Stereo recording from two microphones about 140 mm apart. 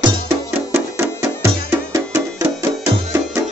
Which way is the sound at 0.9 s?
20° right (ahead or behind).